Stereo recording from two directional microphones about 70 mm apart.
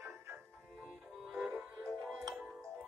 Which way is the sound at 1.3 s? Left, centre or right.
Right.